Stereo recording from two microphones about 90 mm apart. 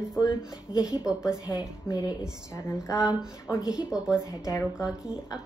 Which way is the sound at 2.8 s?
35° left (ahead or behind).